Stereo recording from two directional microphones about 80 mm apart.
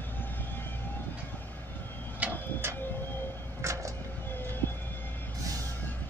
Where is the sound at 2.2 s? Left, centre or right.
Centre.